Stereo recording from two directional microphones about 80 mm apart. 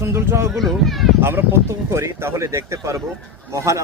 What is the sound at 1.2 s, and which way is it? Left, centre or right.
Speech, right.